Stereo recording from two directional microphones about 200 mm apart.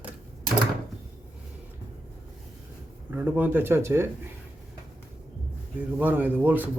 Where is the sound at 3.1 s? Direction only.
10° right (ahead or behind).